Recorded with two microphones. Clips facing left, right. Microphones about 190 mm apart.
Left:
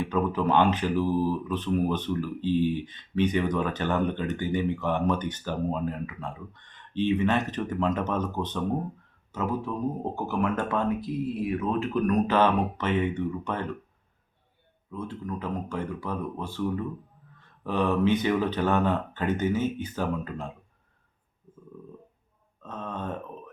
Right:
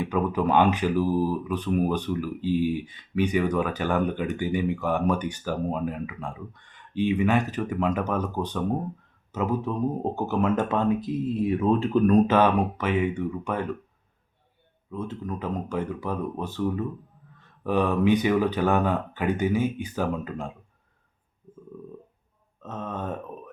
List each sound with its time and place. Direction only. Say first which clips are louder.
0.0 s speech: right 1 dB; 15° right (ahead or behind); by 12.1 s 30° right (ahead or behind)
12.3 s speech: right 2 dB; 10° right (ahead or behind)
14.9 s speech: right 2 dB; 15° right (ahead or behind)
22.6 s speech: right 2 dB; 15° right (ahead or behind)